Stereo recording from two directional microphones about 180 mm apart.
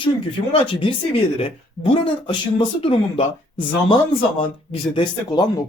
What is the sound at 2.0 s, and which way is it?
A man's voice, 30° left (ahead or behind).